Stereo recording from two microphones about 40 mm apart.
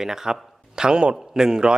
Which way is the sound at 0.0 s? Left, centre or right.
Centre.